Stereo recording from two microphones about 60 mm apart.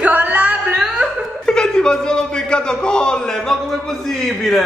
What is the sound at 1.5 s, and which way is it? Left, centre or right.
A man's voice, centre.